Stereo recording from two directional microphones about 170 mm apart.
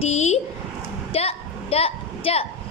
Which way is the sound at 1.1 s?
35° left (ahead or behind).